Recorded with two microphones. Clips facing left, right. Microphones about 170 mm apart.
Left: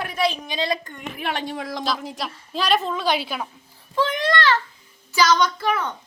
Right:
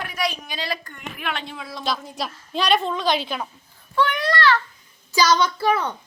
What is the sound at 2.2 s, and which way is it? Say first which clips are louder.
A woman's voice: right 1 dB; centre (ahead or behind).